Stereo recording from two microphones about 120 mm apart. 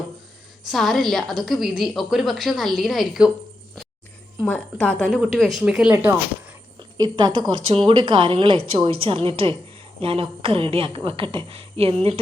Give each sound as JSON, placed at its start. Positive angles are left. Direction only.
{"t": 0.7, "sound": "a woman's voice", "side_deg": 0}
{"t": 4.4, "sound": "a woman's voice", "side_deg": 10}
{"t": 6.7, "sound": "a woman's voice", "side_deg": -35}